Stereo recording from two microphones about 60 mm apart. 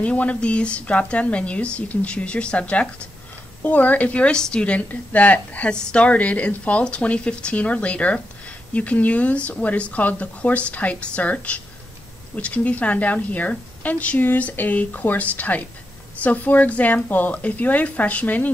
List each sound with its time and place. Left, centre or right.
0.0 s a woman's voice: left